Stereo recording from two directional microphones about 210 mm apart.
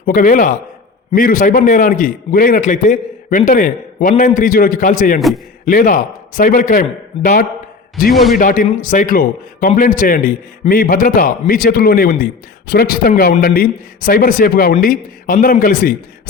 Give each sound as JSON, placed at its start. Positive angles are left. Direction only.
{"t": 0.0, "sound": "a man's voice", "side_deg": 40}
{"t": 8.1, "sound": "a man's voice", "side_deg": 0}
{"t": 8.4, "sound": "a man's voice", "side_deg": 40}